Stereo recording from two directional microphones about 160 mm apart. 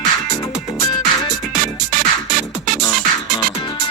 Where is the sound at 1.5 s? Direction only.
55° right (ahead or behind).